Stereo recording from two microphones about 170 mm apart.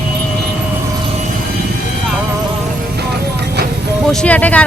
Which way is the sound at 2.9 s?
75° right (ahead or behind).